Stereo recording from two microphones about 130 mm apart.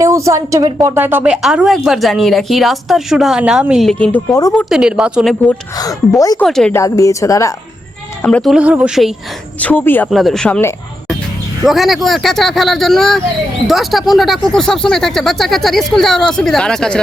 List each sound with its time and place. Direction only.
0.0 s a woman's voice: 25° right (ahead or behind); by 4.2 s 10° left (ahead or behind)
4.3 s a woman's voice: 25° left (ahead or behind)
4.7 s a woman's voice: 5° right (ahead or behind)
5.7 s a woman's voice: 30° left (ahead or behind)
6.4 s a woman's voice: 5° left (ahead or behind)
6.7 s a woman's voice: 25° left (ahead or behind)
8.2 s a woman's voice: 5° left (ahead or behind)
8.5 s speech: 10° right (ahead or behind)
9.6 s speech: 15° left (ahead or behind)
10.1 s a woman's voice: centre (ahead or behind)
11.6 s a woman's voice: centre (ahead or behind)